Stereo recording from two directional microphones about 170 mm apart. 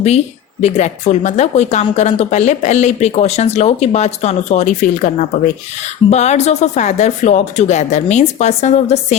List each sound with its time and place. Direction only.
0.6 s speech: 40° left (ahead or behind)